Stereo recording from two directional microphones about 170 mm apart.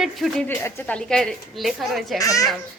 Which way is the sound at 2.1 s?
20° left (ahead or behind).